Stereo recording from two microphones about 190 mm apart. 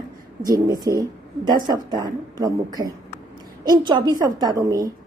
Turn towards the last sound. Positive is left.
turn(degrees=-20)  # may be behind; listen again after turning